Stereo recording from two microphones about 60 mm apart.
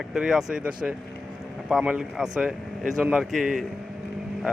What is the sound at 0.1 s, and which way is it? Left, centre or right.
Speech, centre.